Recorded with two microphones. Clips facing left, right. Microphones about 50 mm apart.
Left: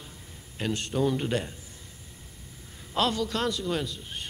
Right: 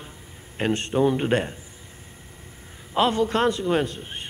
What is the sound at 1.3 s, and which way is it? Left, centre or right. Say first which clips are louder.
Speech: right 7 dB; right.